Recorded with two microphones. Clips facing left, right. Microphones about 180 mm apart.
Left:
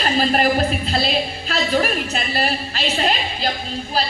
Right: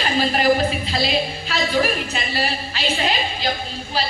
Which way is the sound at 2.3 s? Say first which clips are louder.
Left 2 dB; 45° left (ahead or behind).